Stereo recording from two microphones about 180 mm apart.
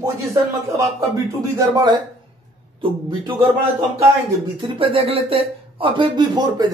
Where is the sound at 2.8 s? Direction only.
25° right (ahead or behind).